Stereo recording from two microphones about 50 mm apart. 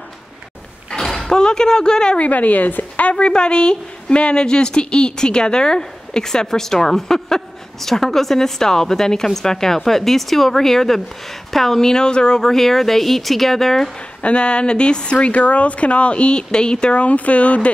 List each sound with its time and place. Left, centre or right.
0.8 s speech: centre
2.2 s a woman's voice: left; by 13.9 s centre
14.2 s speech: left